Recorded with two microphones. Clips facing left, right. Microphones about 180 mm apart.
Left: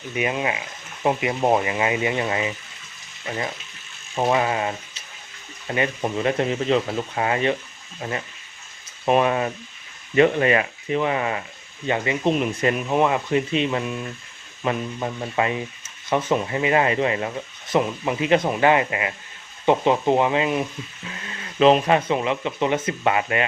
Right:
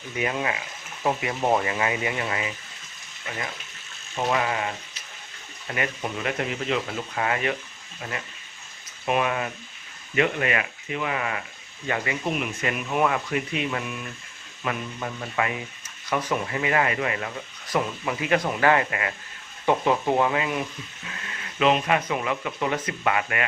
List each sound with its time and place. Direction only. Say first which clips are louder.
0.2 s speech: left 3 dB; 20° left (ahead or behind)
4.1 s speech: left 4 dB; 25° left (ahead or behind)
9.0 s speech: left 6 dB; 35° left (ahead or behind)